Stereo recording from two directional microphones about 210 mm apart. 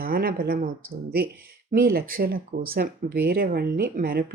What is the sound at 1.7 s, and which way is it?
Speech, 45° right (ahead or behind).